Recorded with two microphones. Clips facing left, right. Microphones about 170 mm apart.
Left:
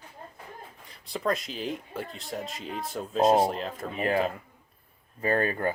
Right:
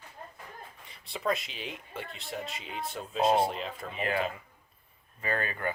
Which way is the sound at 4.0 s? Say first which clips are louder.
Left 5 dB; 40° left (ahead or behind).